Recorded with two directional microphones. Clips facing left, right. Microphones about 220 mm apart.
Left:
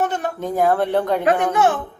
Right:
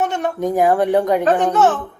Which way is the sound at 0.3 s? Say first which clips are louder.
Right 3 dB; 15° right (ahead or behind).